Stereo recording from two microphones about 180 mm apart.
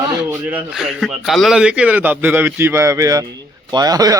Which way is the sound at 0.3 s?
10° right (ahead or behind).